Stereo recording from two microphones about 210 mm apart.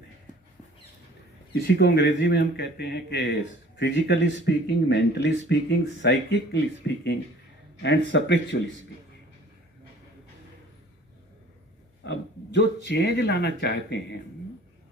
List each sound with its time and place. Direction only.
1.6 s speech: 55° left (ahead or behind)
12.0 s speech: 55° left (ahead or behind)